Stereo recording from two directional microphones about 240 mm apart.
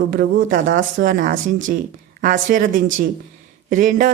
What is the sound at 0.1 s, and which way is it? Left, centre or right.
A woman's voice, right.